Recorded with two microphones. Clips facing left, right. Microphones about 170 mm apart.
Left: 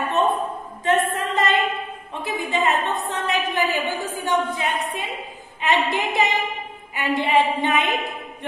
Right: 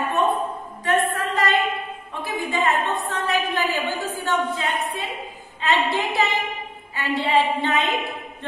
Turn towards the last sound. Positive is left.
turn(degrees=15)  # may be behind; listen again after turning